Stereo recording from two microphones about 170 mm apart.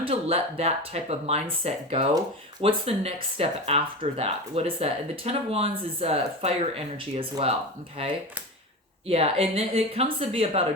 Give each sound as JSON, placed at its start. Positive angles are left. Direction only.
{"t": 0.0, "sound": "speech", "side_deg": -35}
{"t": 9.0, "sound": "speech", "side_deg": -35}